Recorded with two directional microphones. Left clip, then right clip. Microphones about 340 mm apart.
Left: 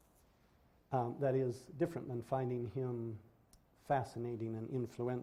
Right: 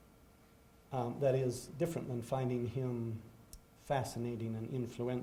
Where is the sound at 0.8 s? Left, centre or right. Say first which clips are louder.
Right 2 dB; left.